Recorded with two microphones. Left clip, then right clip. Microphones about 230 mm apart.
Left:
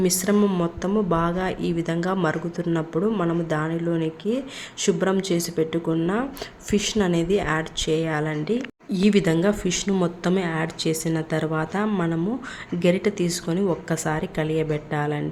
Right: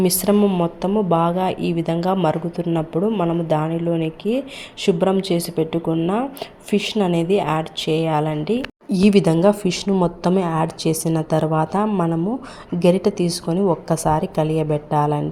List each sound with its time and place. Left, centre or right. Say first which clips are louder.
0.0 s a woman's voice: right 4 dB; centre